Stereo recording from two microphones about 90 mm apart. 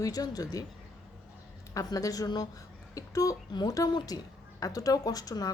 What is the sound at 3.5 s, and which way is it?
A woman's voice, 55° left (ahead or behind).